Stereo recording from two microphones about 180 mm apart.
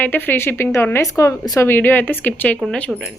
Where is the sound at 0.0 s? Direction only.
10° left (ahead or behind).